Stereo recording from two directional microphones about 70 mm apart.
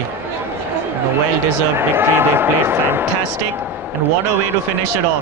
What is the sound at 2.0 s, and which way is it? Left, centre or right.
Speech, right.